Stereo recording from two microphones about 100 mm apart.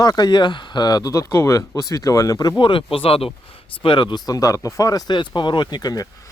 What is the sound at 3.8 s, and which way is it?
Speech, 50° left (ahead or behind).